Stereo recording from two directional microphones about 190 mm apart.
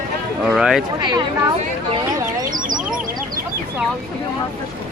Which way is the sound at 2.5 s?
45° right (ahead or behind).